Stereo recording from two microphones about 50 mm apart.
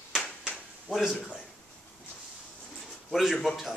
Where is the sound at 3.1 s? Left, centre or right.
Centre.